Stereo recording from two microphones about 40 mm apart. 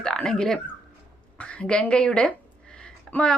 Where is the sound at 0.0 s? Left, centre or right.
Centre.